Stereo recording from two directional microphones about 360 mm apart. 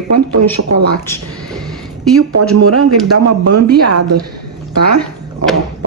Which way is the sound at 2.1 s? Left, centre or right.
Right.